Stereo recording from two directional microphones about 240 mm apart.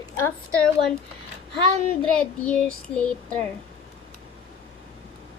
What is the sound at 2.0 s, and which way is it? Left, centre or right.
Child singing, centre.